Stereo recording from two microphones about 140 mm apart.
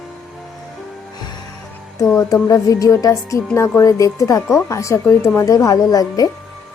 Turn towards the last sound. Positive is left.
turn(degrees=25)  # may be behind; listen again after turning